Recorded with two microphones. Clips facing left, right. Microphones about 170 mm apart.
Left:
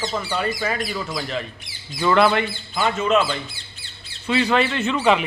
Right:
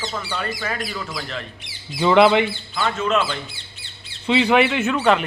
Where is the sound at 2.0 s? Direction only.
20° right (ahead or behind).